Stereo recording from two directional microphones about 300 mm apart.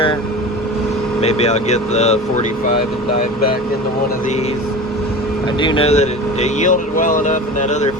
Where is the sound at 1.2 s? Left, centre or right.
Left.